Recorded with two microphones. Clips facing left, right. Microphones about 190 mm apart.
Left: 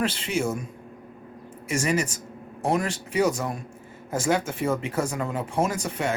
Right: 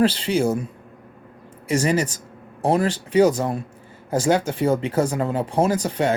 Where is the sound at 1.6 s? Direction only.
30° right (ahead or behind).